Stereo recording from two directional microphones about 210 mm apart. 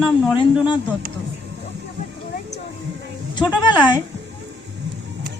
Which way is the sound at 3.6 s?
20° left (ahead or behind).